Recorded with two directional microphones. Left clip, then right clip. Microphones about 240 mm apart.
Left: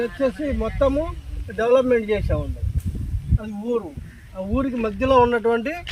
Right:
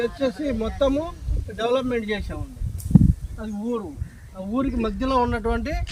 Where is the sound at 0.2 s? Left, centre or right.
Centre.